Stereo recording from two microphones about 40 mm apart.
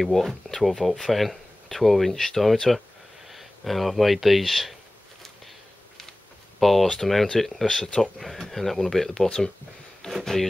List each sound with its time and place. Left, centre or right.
0.0 s speech: centre
6.6 s speech: centre
10.0 s a sound: centre